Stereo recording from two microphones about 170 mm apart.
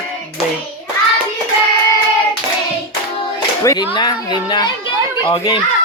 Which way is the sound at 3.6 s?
20° left (ahead or behind).